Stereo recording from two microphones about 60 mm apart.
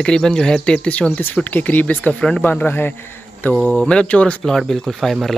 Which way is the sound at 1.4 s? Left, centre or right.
Left.